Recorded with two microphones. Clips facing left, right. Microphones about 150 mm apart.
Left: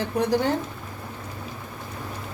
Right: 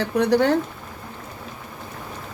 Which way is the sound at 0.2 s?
75° right (ahead or behind).